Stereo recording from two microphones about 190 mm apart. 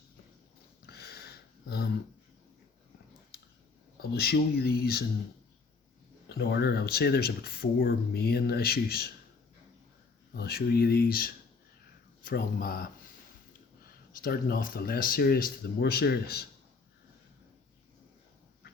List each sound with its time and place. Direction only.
0.9 s a sound: 55° left (ahead or behind)
3.9 s speech: 55° left (ahead or behind)
6.2 s speech: 60° left (ahead or behind)
10.3 s speech: 55° left (ahead or behind)
14.2 s speech: 50° left (ahead or behind)